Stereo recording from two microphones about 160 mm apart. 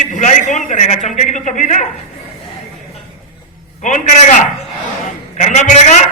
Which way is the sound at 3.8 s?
50° left (ahead or behind).